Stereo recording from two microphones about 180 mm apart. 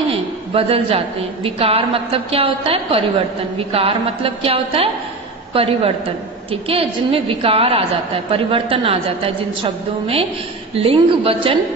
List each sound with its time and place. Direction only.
0.1 s a woman's voice: 30° right (ahead or behind)